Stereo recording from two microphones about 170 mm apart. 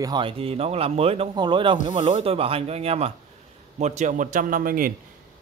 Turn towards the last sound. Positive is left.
turn(degrees=-55)  # may be behind; listen again after turning